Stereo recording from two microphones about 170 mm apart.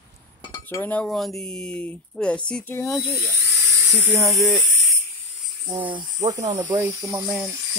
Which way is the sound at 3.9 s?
15° right (ahead or behind).